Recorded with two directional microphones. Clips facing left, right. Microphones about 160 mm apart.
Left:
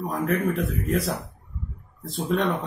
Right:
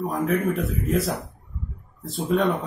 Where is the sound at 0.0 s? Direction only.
Centre (ahead or behind).